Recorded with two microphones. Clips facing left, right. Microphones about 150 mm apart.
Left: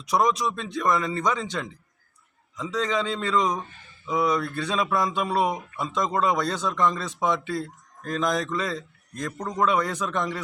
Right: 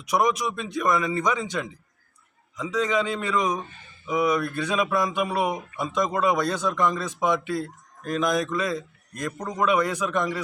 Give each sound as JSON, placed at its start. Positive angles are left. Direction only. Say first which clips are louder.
{"t": 0.1, "sound": "a man's voice", "louder": "even", "side_deg": -15}